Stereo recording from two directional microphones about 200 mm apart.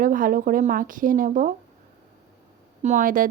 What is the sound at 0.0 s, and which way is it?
A woman's voice, 45° right (ahead or behind).